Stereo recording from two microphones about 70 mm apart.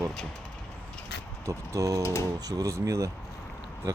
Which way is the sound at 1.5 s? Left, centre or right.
Right.